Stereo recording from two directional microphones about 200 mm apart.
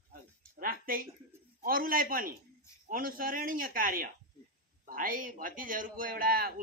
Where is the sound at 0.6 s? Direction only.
45° right (ahead or behind).